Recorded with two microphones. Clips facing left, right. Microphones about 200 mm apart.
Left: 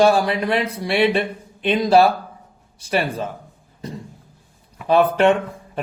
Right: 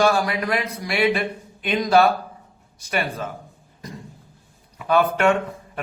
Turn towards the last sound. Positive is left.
turn(degrees=30)  # may be behind; listen again after turning